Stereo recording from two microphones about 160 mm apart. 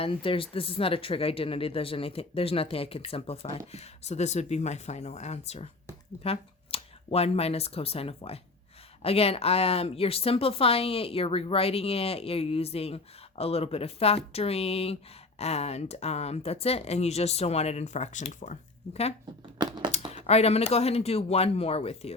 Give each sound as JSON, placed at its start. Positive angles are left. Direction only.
{"t": 0.0, "sound": "speech", "side_deg": 35}
{"t": 19.5, "sound": "a sound", "side_deg": -25}
{"t": 20.1, "sound": "speech", "side_deg": 40}